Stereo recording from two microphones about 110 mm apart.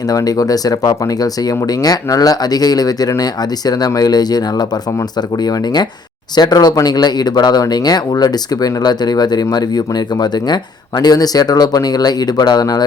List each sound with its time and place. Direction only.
0.1 s speech: 35° left (ahead or behind)